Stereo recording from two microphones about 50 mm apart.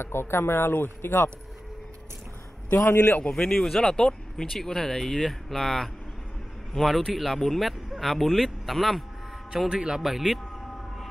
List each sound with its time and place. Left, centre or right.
0.0 s speech: left
2.7 s speech: left
3.0 s a man's voice: left
3.3 s a man's voice: centre
9.5 s speech: centre